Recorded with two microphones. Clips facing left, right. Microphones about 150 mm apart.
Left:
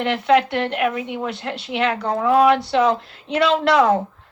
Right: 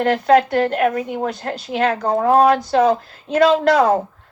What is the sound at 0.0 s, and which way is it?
Speech, 45° right (ahead or behind).